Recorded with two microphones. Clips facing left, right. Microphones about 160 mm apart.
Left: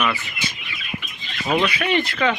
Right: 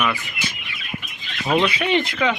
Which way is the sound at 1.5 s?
20° right (ahead or behind).